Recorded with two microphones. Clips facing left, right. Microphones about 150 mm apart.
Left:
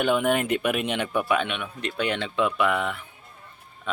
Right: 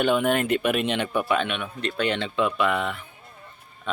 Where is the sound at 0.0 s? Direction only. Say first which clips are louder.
Right 1 dB; 10° left (ahead or behind).